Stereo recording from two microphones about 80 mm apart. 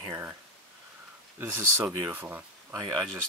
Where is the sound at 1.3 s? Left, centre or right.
Right.